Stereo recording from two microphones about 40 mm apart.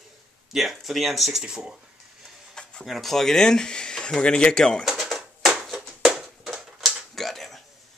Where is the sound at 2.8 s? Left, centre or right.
Centre.